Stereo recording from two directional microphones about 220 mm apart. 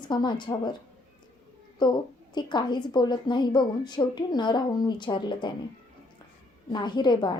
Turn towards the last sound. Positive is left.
turn(degrees=20)  # may be behind; listen again after turning